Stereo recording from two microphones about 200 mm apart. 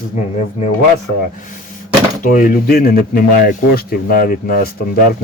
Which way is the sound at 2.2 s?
40° left (ahead or behind).